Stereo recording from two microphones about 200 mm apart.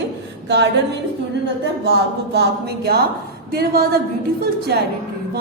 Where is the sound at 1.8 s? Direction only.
55° right (ahead or behind).